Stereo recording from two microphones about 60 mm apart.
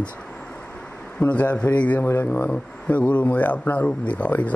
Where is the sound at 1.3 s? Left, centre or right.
Left.